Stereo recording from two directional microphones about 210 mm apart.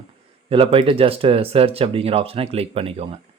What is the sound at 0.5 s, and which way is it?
A man's voice, 25° right (ahead or behind).